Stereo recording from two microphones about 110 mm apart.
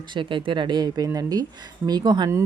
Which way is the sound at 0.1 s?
45° right (ahead or behind).